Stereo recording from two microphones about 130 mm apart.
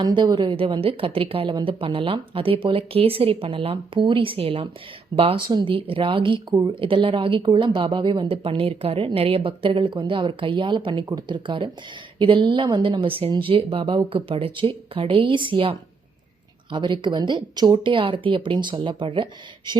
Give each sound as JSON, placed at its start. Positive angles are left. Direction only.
{"t": 0.0, "sound": "speech", "side_deg": -35}